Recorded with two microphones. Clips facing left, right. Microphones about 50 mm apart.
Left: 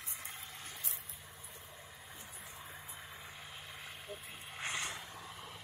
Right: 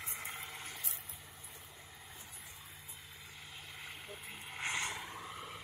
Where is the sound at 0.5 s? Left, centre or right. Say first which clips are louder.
Right 2 dB; centre.